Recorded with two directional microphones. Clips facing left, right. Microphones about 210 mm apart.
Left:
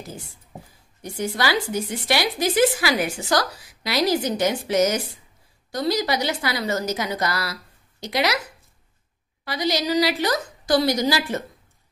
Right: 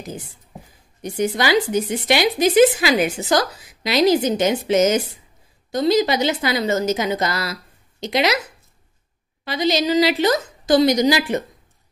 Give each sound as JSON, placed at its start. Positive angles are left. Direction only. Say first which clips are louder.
{"t": 0.0, "sound": "speech", "louder": "right 5 dB", "side_deg": -20}
{"t": 9.4, "sound": "speech", "louder": "right 4 dB", "side_deg": -25}